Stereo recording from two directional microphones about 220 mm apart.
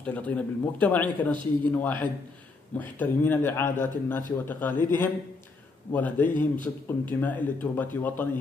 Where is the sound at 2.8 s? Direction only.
10° left (ahead or behind).